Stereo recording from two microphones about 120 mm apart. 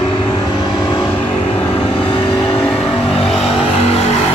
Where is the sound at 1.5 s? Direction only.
50° left (ahead or behind).